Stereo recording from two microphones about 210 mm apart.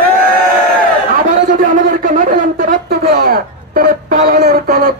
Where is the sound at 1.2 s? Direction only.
40° right (ahead or behind).